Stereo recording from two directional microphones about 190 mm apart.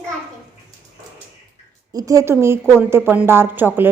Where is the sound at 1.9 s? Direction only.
20° right (ahead or behind).